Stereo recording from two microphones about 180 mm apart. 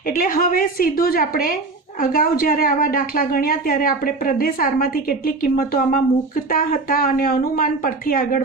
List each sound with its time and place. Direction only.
0.1 s a woman's voice: 50° left (ahead or behind)